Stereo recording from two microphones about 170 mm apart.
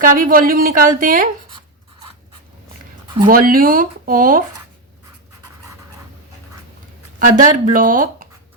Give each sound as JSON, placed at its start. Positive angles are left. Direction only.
{"t": 0.0, "sound": "speech", "side_deg": -50}
{"t": 3.2, "sound": "speech", "side_deg": -55}
{"t": 7.2, "sound": "speech", "side_deg": -50}